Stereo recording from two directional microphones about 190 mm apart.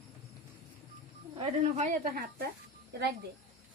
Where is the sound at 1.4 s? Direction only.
35° right (ahead or behind); by 2.5 s 50° right (ahead or behind).